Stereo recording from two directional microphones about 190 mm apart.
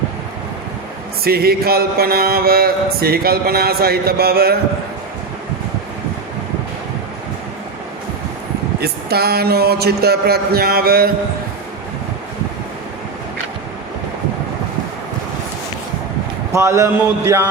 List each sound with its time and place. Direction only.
1.2 s mantra: 55° right (ahead or behind)
8.8 s speech: 55° right (ahead or behind)
16.5 s speech: 15° right (ahead or behind)